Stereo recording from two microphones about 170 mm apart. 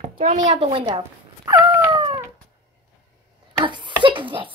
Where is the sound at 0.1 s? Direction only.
50° right (ahead or behind); by 2.2 s 25° right (ahead or behind).